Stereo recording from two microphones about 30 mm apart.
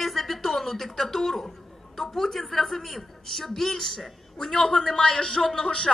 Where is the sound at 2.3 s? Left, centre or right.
Centre.